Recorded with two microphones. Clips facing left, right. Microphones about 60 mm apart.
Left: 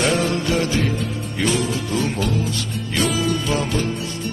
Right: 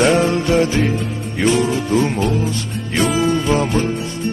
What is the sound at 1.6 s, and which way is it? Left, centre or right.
Music, right.